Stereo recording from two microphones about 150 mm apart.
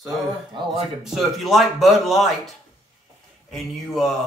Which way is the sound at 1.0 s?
Centre (ahead or behind).